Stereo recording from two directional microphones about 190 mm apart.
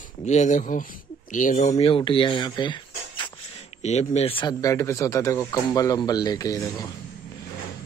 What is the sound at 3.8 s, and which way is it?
Speech, 35° left (ahead or behind).